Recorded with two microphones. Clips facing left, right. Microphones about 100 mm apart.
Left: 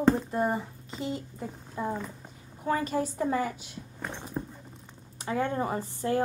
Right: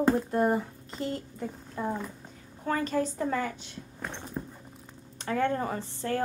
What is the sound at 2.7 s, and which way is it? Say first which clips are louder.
Speech: even; 15° left (ahead or behind).